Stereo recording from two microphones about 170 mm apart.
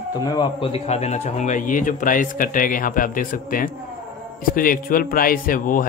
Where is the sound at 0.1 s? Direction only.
25° left (ahead or behind).